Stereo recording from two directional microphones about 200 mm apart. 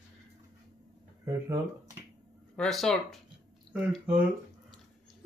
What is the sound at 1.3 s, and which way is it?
Speech, 15° right (ahead or behind).